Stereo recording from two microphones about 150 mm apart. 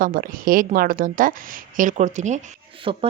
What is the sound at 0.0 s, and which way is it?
A woman's voice, 70° right (ahead or behind).